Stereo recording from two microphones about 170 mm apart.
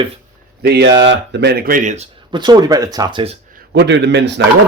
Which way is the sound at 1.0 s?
90° right.